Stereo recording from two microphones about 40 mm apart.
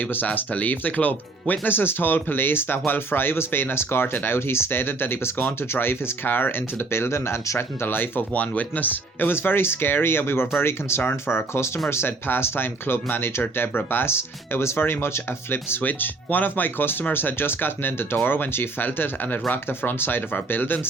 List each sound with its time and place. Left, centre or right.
0.0 s speech: left
1.7 s speech: left
7.8 s speech: left
8.3 s speech: left
9.4 s speech: left
11.9 s speech: left
15.8 s speech: left